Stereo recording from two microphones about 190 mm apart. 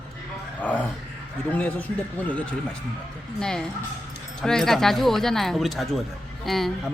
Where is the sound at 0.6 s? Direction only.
10° left (ahead or behind).